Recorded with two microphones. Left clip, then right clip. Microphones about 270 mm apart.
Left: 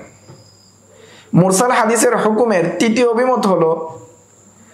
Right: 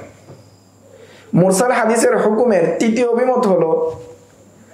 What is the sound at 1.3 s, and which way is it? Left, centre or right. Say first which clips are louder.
Speech: even; left.